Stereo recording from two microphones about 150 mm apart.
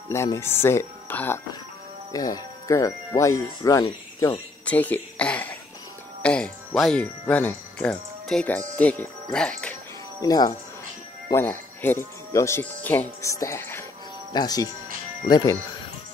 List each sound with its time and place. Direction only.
0.1 s speech: 15° left (ahead or behind)
2.1 s speech: 25° left (ahead or behind)
4.6 s speech: 10° left (ahead or behind)
10.2 s speech: 25° left (ahead or behind)
11.3 s speech: 15° left (ahead or behind)
14.3 s speech: 25° left (ahead or behind)